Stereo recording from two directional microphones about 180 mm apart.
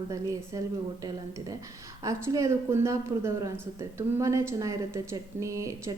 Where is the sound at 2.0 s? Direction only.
15° right (ahead or behind).